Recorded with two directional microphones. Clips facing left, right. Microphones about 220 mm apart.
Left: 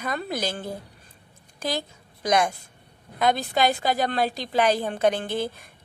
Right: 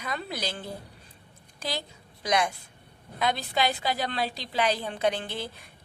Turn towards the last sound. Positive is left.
turn(degrees=50)  # may be behind; listen again after turning